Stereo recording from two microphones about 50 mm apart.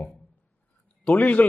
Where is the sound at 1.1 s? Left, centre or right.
Left.